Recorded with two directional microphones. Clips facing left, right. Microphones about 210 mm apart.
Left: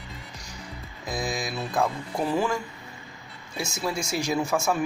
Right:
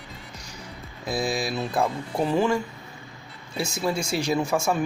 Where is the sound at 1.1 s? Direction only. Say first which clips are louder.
Right 4 dB; 30° right (ahead or behind).